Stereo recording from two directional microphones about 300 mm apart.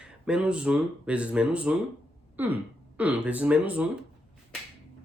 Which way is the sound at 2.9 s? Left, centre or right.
Centre.